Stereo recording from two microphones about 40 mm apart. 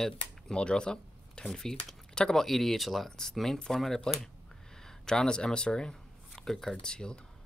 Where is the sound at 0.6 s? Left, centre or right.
Left.